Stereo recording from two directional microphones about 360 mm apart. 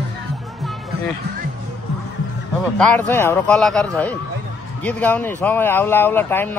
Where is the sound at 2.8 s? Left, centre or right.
Centre.